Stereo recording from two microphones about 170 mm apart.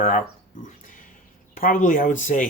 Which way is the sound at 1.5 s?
55° left (ahead or behind).